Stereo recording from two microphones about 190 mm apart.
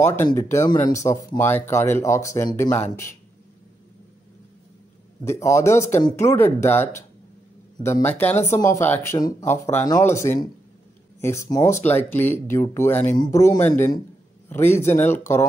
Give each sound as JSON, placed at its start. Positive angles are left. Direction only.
{"t": 0.0, "sound": "speech", "side_deg": 15}
{"t": 5.2, "sound": "a man's voice", "side_deg": 15}